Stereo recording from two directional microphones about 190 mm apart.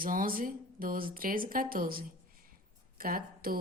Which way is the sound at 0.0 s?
45° right (ahead or behind).